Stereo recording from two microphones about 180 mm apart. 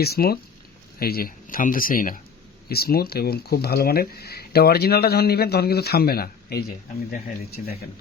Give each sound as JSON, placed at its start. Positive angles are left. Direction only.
{"t": 0.0, "sound": "speech", "side_deg": 60}